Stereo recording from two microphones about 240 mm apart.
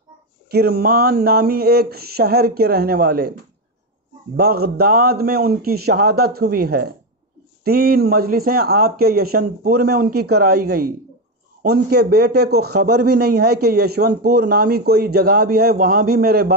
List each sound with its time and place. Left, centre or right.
0.5 s speech: right
4.4 s speech: right
13.0 s a man's voice: right
13.4 s speech: right